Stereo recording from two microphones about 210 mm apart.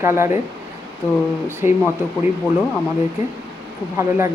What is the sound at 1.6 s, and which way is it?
Speech, 30° left (ahead or behind).